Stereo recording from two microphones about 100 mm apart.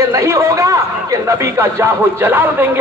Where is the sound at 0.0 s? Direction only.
30° right (ahead or behind).